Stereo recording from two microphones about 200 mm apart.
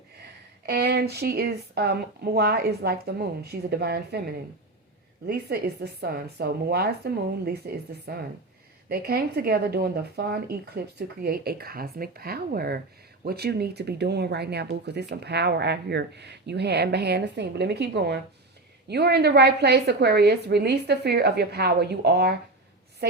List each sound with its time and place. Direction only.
0.2 s speech: 55° right (ahead or behind)